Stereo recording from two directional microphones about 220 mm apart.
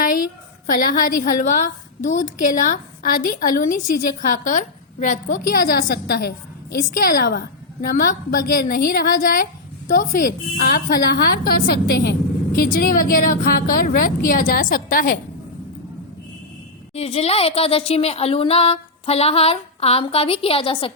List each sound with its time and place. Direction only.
0.7 s a woman's voice: 40° left (ahead or behind)
16.9 s speech: 30° left (ahead or behind)